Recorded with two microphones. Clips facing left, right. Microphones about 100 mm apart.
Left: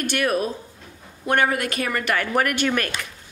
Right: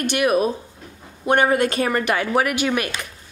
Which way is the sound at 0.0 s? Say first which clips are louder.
Right 4 dB; 15° right (ahead or behind).